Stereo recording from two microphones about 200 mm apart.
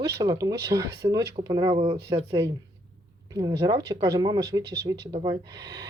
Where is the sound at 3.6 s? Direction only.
20° right (ahead or behind).